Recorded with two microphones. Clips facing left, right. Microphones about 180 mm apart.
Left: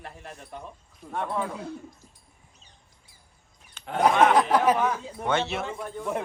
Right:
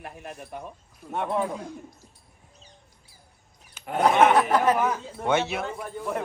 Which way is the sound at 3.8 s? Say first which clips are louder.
Right 1 dB; 5° right (ahead or behind).